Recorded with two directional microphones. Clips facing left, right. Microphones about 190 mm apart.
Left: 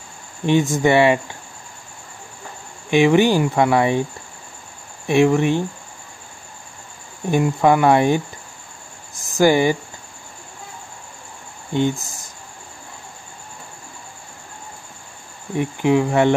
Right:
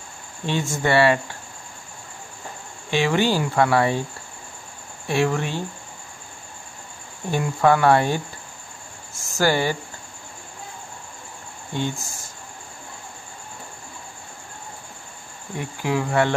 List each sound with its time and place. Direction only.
0.5 s speech: 15° left (ahead or behind)
2.9 s speech: 15° left (ahead or behind)
5.0 s speech: 15° left (ahead or behind)
7.2 s speech: 15° left (ahead or behind)
11.7 s speech: 20° left (ahead or behind)
15.8 s cricket: 20° left (ahead or behind)